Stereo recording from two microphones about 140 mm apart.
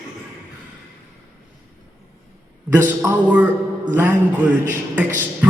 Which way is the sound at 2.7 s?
15° right (ahead or behind).